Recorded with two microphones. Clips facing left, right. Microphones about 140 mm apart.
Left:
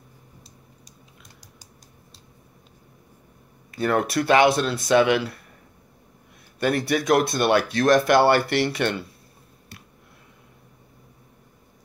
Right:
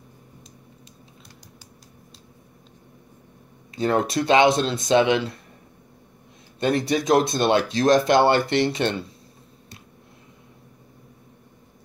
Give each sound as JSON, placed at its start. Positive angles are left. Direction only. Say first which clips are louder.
{"t": 3.7, "sound": "speech", "louder": "right 1 dB", "side_deg": -25}
{"t": 6.6, "sound": "speech", "louder": "right 1 dB", "side_deg": -20}